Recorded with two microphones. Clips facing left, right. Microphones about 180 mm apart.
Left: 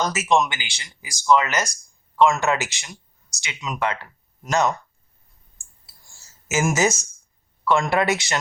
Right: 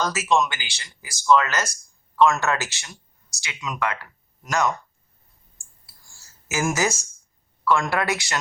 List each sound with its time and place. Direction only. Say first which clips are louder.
0.0 s speech: left 1 dB; 20° left (ahead or behind)
6.5 s speech: left 3 dB; 20° left (ahead or behind)